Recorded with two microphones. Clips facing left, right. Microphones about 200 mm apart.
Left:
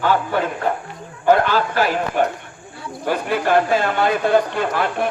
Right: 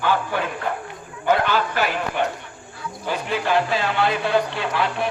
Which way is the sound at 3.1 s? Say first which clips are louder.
Left 4 dB; 50° left (ahead or behind).